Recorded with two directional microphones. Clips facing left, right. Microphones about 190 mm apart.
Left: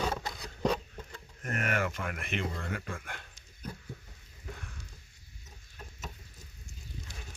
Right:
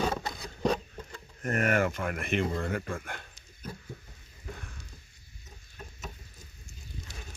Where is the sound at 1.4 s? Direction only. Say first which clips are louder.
Right 6 dB; 40° right (ahead or behind).